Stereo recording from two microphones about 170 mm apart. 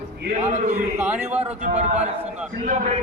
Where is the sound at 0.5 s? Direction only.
45° right (ahead or behind).